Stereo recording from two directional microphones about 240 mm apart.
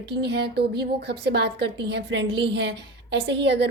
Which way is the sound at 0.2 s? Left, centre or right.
Right.